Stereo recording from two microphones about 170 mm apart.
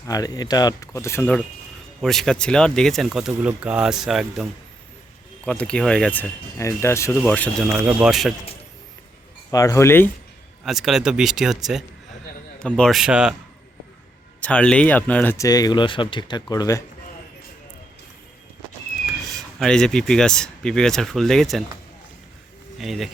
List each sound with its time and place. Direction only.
0.1 s speech: 20° left (ahead or behind); by 4.4 s centre (ahead or behind)
5.5 s speech: 5° left (ahead or behind)
7.6 s speech: 10° right (ahead or behind)
9.5 s speech: 20° left (ahead or behind)
10.6 s speech: centre (ahead or behind)
14.4 s speech: 5° left (ahead or behind)
19.5 s speech: 5° left (ahead or behind)
22.8 s speech: centre (ahead or behind)